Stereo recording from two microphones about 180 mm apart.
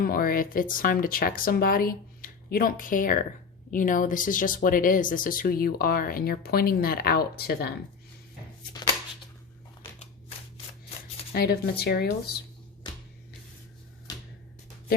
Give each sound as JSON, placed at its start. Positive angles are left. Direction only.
{"t": 0.0, "sound": "speech", "side_deg": 55}
{"t": 11.3, "sound": "speech", "side_deg": 60}